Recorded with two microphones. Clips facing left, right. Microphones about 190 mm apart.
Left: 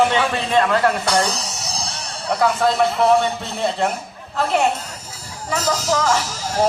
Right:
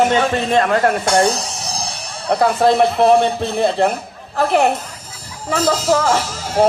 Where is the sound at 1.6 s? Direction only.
60° right (ahead or behind).